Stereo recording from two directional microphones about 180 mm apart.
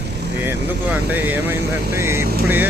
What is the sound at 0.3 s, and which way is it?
Speech, 10° right (ahead or behind).